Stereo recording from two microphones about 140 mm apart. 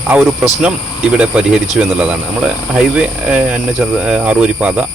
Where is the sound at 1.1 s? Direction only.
5° right (ahead or behind).